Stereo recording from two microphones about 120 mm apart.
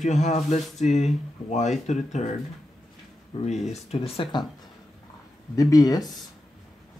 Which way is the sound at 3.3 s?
50° left (ahead or behind).